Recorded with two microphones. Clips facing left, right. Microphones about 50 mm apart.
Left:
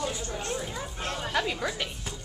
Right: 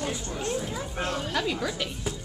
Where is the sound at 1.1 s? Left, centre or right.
Centre.